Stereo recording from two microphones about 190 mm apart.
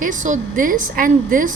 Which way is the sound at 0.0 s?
40° right (ahead or behind).